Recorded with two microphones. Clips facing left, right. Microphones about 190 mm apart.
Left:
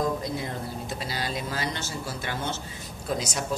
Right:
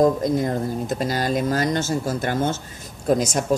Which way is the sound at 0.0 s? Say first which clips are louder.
Right 10 dB; 45° right (ahead or behind).